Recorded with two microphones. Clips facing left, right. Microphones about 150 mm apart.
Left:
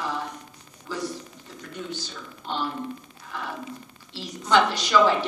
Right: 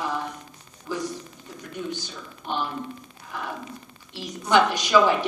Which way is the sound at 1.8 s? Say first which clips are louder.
Right 2 dB; 15° right (ahead or behind).